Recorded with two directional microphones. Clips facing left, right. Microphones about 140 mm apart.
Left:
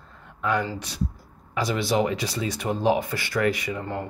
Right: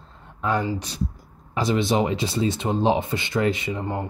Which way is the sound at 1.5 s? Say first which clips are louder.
Right 3 dB; 25° right (ahead or behind).